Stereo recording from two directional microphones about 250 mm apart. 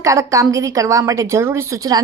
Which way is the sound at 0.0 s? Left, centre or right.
Centre.